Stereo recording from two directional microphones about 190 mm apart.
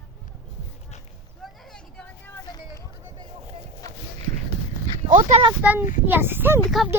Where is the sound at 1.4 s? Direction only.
5° left (ahead or behind).